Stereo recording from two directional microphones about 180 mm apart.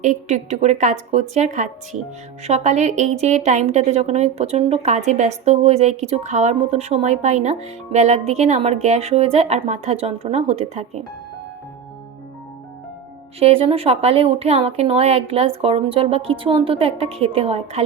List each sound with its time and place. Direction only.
0.0 s a woman's voice: 45° right (ahead or behind)
13.4 s a woman's voice: 30° right (ahead or behind)